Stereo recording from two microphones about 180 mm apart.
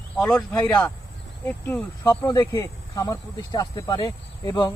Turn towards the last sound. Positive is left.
turn(degrees=25)  # may be behind; listen again after turning